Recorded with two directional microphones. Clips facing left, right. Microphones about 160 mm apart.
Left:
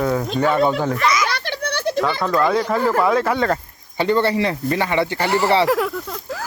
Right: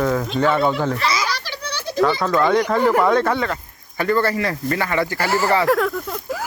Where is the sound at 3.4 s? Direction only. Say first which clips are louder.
Left 4 dB; 40° left (ahead or behind).